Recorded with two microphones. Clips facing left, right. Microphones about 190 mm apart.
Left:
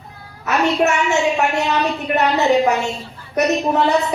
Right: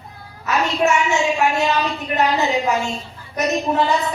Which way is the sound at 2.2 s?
70° left (ahead or behind).